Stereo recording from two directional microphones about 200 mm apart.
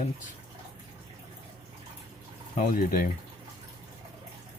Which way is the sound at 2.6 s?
45° left (ahead or behind).